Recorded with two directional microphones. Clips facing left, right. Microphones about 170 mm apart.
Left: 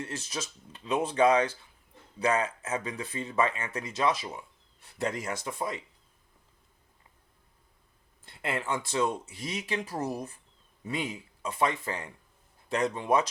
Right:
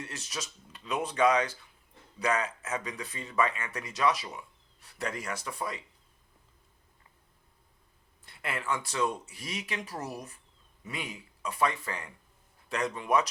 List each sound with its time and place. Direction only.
0.0 s speech: 25° left (ahead or behind)
8.2 s speech: 25° left (ahead or behind)